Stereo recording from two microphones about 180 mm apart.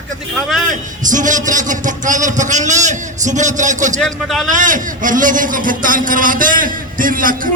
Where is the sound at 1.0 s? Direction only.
45° right (ahead or behind).